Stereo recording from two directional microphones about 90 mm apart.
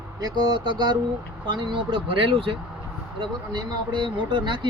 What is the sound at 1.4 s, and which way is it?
Speech, 55° right (ahead or behind).